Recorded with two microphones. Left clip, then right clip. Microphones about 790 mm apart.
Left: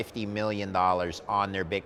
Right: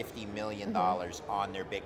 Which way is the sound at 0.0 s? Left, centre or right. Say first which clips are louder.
Left 7 dB; left.